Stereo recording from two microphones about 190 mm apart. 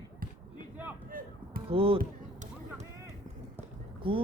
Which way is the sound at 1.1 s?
50° right (ahead or behind).